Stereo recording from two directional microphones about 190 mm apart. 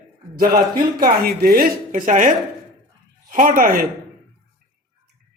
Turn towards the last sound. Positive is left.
turn(degrees=-50)  # may be behind; listen again after turning